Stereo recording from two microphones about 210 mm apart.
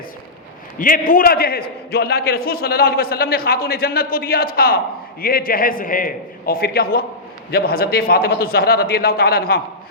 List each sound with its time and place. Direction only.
0.8 s a man's voice: 40° left (ahead or behind)